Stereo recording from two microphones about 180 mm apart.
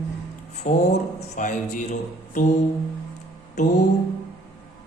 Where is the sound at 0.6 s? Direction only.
40° left (ahead or behind).